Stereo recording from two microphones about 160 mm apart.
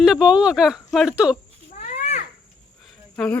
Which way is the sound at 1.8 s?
50° left (ahead or behind).